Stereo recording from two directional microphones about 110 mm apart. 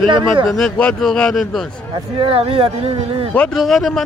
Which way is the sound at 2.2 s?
55° right (ahead or behind).